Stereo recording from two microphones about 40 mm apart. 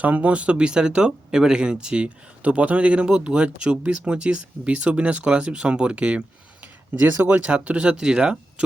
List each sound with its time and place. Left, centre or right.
0.0 s speech: right
2.4 s a man's voice: right